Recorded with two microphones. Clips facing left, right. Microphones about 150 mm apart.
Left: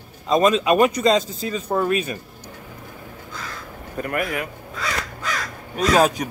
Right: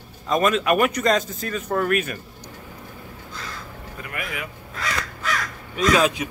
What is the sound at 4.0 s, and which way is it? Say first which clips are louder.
Speech: left 9 dB; 45° left (ahead or behind).